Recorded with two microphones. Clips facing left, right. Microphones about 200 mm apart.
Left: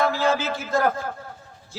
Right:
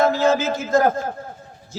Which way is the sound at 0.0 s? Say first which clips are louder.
Right 5 dB; 45° right (ahead or behind).